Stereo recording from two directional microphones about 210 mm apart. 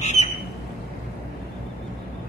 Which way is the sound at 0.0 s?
35° left (ahead or behind).